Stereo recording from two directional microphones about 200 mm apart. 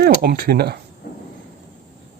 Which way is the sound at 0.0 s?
50° right (ahead or behind).